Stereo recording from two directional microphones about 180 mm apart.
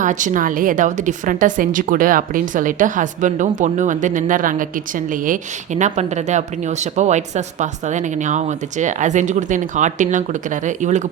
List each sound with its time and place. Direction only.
0.0 s a woman's voice: 45° right (ahead or behind)